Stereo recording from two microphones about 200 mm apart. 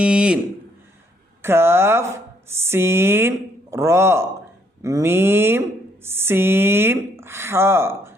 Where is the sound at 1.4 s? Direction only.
10° right (ahead or behind).